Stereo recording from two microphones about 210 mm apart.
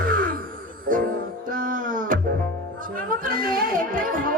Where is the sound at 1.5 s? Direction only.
40° right (ahead or behind).